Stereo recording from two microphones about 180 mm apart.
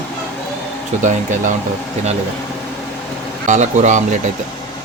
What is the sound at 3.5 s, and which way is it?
Speech, 40° right (ahead or behind).